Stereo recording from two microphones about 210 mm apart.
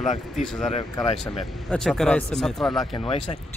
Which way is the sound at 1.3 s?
Centre (ahead or behind).